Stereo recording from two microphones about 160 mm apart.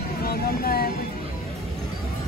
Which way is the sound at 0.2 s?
70° left (ahead or behind).